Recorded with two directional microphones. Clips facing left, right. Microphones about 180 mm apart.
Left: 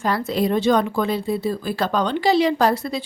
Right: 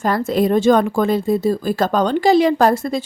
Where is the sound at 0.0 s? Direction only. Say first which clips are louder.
Right 4 dB; 45° right (ahead or behind).